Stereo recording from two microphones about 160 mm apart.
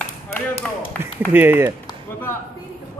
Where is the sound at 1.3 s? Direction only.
15° right (ahead or behind).